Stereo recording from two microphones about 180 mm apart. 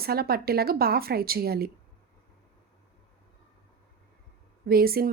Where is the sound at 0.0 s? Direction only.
60° right (ahead or behind).